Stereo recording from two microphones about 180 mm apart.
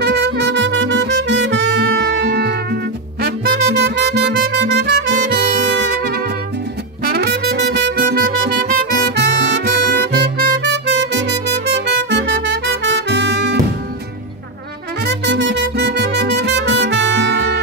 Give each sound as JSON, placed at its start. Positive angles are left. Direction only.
{"t": 0.0, "sound": "music", "side_deg": -70}
{"t": 15.0, "sound": "music", "side_deg": -75}